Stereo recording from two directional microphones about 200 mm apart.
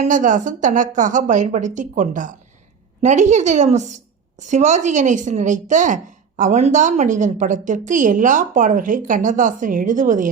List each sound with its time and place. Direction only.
0.0 s a woman's voice: 40° right (ahead or behind)